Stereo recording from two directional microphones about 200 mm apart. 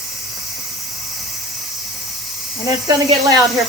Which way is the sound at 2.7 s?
20° right (ahead or behind).